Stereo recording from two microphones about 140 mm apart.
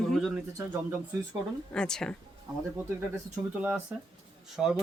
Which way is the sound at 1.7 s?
5° left (ahead or behind).